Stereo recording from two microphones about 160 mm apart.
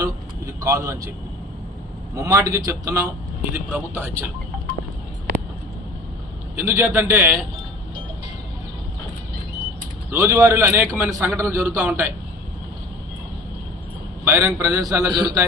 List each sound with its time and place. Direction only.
0.6 s a man's voice: 20° right (ahead or behind)
2.1 s a man's voice: 20° right (ahead or behind)
6.6 s a man's voice: 15° right (ahead or behind)
10.1 s a man's voice: 15° right (ahead or behind)
14.3 s a man's voice: 15° right (ahead or behind)